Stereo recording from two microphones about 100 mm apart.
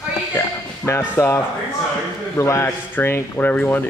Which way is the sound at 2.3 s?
30° left (ahead or behind).